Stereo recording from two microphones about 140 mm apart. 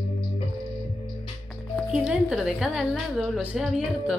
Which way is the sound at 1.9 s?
5° right (ahead or behind).